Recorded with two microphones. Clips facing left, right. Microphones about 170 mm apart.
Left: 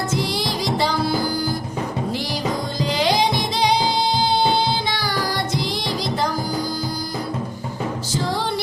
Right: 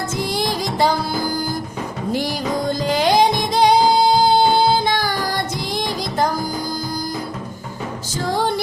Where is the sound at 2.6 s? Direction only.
50° right (ahead or behind).